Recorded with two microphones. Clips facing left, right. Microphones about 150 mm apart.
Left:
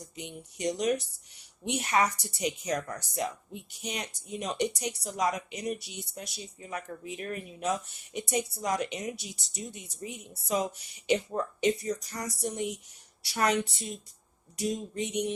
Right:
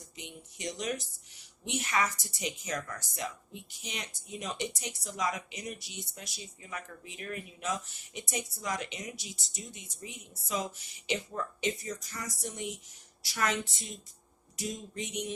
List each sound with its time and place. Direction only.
0.0 s speech: 40° left (ahead or behind)